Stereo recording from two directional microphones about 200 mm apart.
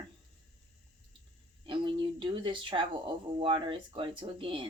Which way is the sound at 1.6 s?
25° right (ahead or behind).